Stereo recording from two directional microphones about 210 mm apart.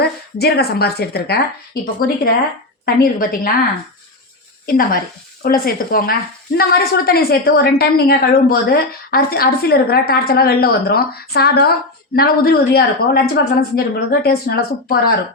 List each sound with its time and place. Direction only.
0.0 s a woman's voice: 50° left (ahead or behind)
4.6 s a woman's voice: 45° left (ahead or behind)